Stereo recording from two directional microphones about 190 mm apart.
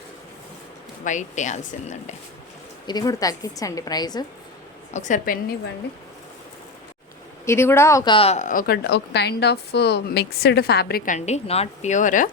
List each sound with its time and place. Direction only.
1.0 s speech: 40° left (ahead or behind)
2.8 s a woman's voice: 20° left (ahead or behind)
4.9 s speech: 40° left (ahead or behind)
7.4 s a woman's voice: 15° left (ahead or behind); by 12.3 s 40° left (ahead or behind)